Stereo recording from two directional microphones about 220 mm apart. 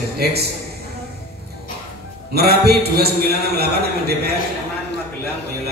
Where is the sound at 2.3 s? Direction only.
45° right (ahead or behind).